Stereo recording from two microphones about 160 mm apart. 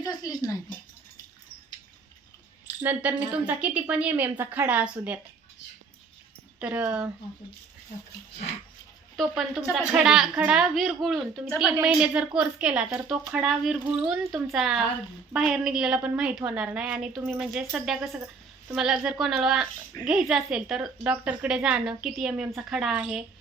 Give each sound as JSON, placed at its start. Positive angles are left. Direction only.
{"t": 0.0, "sound": "a sound", "side_deg": 25}
{"t": 2.8, "sound": "a woman's voice", "side_deg": -10}
{"t": 6.6, "sound": "speech", "side_deg": -10}
{"t": 9.1, "sound": "a woman's voice", "side_deg": 0}